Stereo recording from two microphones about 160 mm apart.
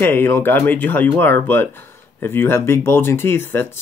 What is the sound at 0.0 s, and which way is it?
Speech, 15° left (ahead or behind).